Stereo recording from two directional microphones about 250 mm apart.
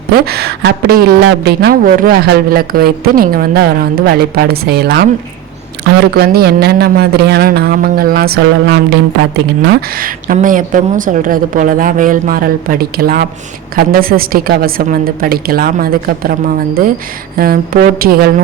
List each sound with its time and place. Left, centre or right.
0.1 s a woman's voice: right
6.1 s a woman's voice: right
17.3 s a woman's voice: right